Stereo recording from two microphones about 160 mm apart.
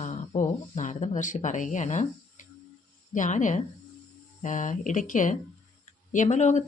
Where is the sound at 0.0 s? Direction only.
45° left (ahead or behind).